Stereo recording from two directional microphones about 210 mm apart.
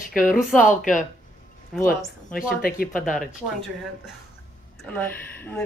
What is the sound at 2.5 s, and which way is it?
Speech, 45° left (ahead or behind).